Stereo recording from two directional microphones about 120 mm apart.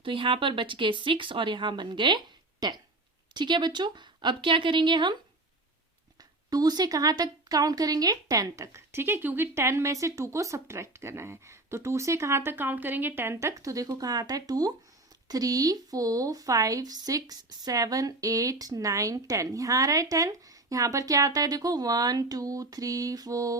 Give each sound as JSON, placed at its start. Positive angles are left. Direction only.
{"t": 0.0, "sound": "speech", "side_deg": -45}
{"t": 6.1, "sound": "a woman's voice", "side_deg": -35}